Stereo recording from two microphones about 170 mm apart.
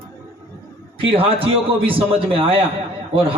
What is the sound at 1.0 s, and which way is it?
A man's voice, 35° right (ahead or behind).